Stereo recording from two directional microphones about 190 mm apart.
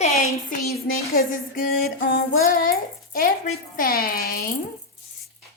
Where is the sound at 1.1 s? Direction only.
50° left (ahead or behind).